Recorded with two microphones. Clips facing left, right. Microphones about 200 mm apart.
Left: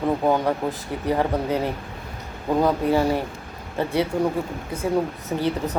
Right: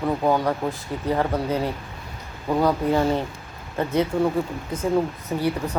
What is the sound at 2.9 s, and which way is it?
Speech, 10° left (ahead or behind).